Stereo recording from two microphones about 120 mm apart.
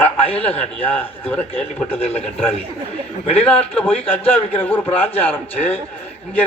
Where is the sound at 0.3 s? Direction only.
10° left (ahead or behind).